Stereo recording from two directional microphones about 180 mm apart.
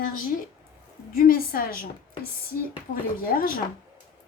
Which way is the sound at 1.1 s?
55° left (ahead or behind).